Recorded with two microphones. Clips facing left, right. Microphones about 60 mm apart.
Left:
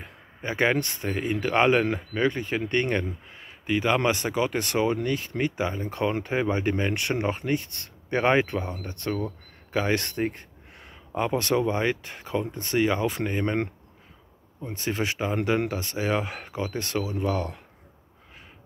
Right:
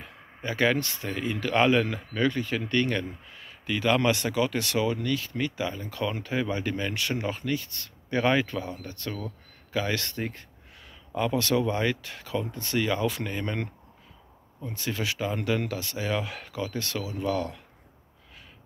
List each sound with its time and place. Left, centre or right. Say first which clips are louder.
0.0 s speech: left 1 dB; left